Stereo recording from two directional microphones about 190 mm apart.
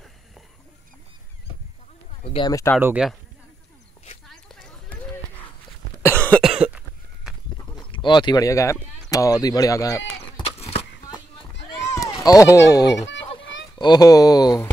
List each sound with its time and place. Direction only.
2.2 s speech: 25° left (ahead or behind)
2.8 s speech: 5° right (ahead or behind)
6.0 s cough: 10° left (ahead or behind)
6.5 s cough: 5° right (ahead or behind)
7.9 s speech: 25° left (ahead or behind)
10.3 s a sound: 30° left (ahead or behind)
12.3 s a child's voice: 15° left (ahead or behind)